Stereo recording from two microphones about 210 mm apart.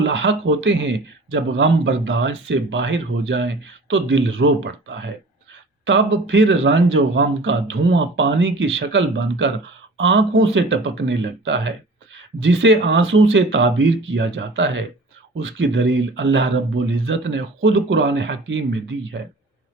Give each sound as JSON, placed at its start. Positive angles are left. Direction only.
{"t": 0.0, "sound": "speech", "side_deg": -60}